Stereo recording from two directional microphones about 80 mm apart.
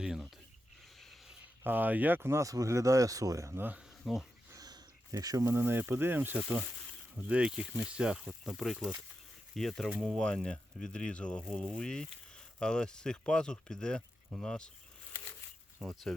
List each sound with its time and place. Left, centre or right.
0.9 s a sound: centre
1.6 s speech: right
4.0 s speech: centre
4.5 s a sound: right
5.5 s speech: right; by 14.7 s centre
15.8 s speech: centre